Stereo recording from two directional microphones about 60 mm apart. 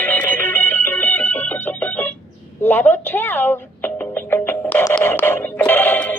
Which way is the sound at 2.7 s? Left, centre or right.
Left.